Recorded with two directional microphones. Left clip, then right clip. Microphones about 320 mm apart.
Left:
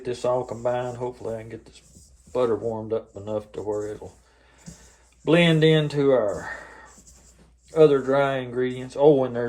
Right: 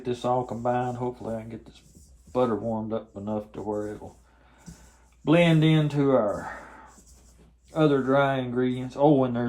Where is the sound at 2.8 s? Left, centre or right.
Right.